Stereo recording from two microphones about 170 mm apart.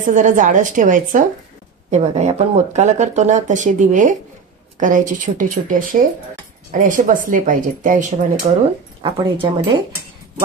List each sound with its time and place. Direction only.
0.0 s speech: 50° right (ahead or behind)
9.0 s speech: 30° right (ahead or behind)